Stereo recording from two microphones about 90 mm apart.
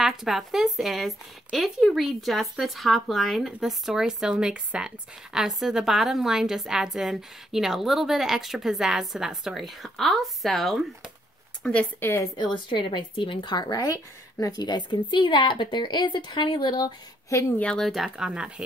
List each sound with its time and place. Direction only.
0.0 s speech: 5° right (ahead or behind)
12.0 s a woman's voice: 25° left (ahead or behind)
12.4 s a woman's voice: 60° left (ahead or behind)
17.6 s speech: 10° left (ahead or behind); by 18.5 s 10° right (ahead or behind)